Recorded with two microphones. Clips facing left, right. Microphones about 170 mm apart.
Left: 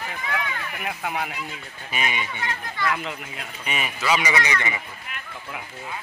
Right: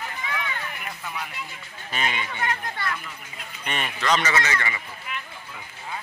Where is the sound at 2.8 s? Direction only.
90° left.